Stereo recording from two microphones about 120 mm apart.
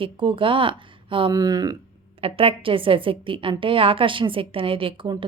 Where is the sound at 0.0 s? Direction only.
45° right (ahead or behind).